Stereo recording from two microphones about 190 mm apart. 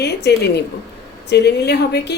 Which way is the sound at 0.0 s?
60° left (ahead or behind).